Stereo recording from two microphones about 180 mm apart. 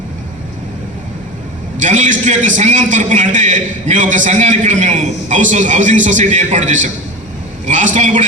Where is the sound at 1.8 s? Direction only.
45° right (ahead or behind).